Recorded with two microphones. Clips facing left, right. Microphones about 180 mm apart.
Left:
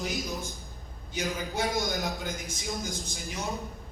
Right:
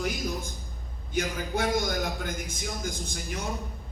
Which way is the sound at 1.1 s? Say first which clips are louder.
Right 3 dB; 55° right (ahead or behind).